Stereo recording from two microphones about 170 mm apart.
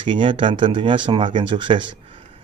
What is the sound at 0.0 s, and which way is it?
Speech, 30° right (ahead or behind).